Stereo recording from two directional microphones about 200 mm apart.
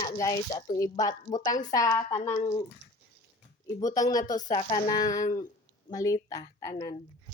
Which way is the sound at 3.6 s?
15° left (ahead or behind).